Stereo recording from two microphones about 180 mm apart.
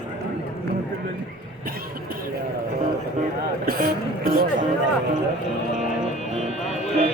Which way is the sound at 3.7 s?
55° right (ahead or behind).